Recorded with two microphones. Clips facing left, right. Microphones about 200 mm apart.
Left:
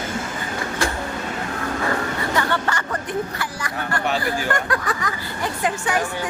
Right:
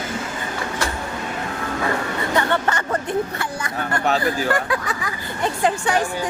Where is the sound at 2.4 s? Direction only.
25° right (ahead or behind).